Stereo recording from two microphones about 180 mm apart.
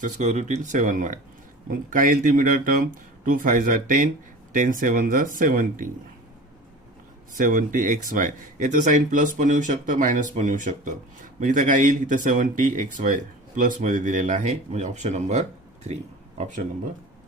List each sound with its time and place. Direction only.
0.0 s speech: 40° right (ahead or behind)
7.3 s speech: 50° right (ahead or behind)